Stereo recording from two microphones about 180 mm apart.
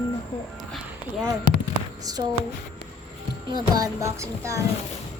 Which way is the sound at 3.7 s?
20° right (ahead or behind).